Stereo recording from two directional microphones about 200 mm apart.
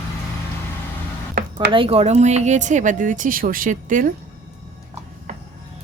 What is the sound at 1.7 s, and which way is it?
Speech, 30° right (ahead or behind).